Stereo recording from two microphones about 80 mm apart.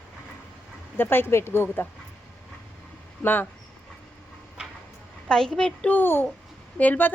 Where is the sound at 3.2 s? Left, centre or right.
Left.